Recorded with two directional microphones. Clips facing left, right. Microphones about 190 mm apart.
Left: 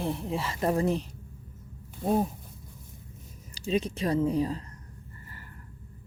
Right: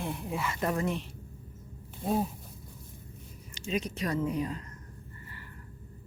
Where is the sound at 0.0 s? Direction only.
30° left (ahead or behind).